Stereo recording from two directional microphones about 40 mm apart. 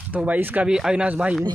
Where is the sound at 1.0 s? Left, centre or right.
Right.